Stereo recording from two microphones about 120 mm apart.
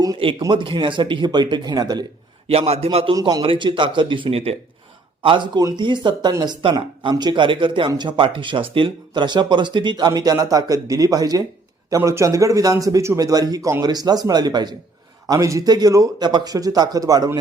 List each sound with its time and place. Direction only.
0.2 s a man's voice: 45° right (ahead or behind)
2.5 s a man's voice: 60° right (ahead or behind)
3.2 s a man's voice: 30° right (ahead or behind)
3.4 s speech: 45° right (ahead or behind)
5.2 s a man's voice: 45° right (ahead or behind)
10.1 s a man's voice: 30° right (ahead or behind)